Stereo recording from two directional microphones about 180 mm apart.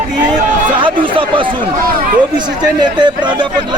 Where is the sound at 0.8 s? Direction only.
30° right (ahead or behind).